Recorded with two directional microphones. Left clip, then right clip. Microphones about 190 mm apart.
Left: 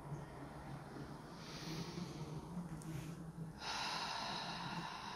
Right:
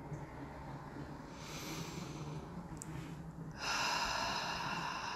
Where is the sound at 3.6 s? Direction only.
15° right (ahead or behind).